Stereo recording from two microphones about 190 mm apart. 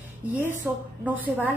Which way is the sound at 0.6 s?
10° right (ahead or behind).